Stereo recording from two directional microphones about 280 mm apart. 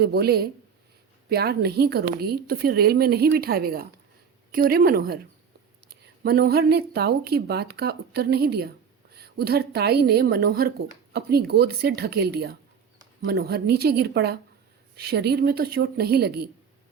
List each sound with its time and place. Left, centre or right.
0.0 s a woman's voice: right
6.2 s a woman's voice: right